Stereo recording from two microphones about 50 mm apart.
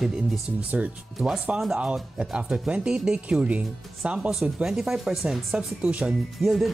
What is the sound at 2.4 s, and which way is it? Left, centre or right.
Speech, centre.